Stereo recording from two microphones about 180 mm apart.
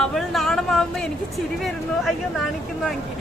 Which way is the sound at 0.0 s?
Centre (ahead or behind).